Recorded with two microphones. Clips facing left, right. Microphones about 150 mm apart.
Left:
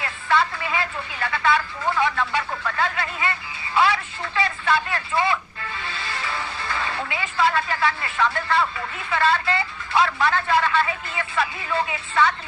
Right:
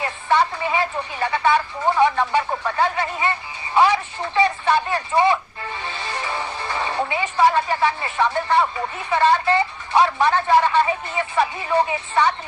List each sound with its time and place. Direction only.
0.0 s a sound: 20° right (ahead or behind)
3.8 s radio: 15° right (ahead or behind)
8.6 s speech: 25° right (ahead or behind)